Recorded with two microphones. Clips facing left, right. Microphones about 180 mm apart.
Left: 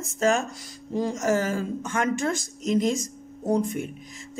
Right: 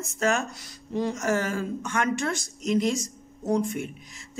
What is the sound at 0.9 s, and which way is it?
Speech, 40° left (ahead or behind).